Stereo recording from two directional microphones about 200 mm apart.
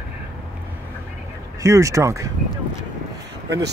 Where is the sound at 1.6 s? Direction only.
15° right (ahead or behind).